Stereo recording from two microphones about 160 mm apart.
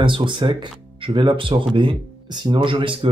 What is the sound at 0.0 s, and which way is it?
Speech, 30° right (ahead or behind).